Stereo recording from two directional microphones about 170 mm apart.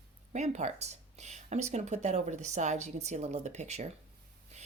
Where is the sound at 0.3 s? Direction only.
40° right (ahead or behind).